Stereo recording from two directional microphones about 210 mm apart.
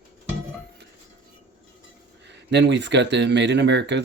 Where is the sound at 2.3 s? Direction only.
55° right (ahead or behind).